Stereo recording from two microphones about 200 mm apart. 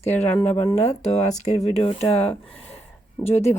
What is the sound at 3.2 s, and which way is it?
Speech, 20° left (ahead or behind).